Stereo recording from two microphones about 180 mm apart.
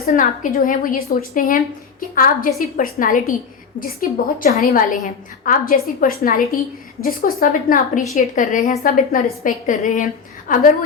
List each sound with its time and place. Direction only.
0.0 s a woman's voice: 50° left (ahead or behind)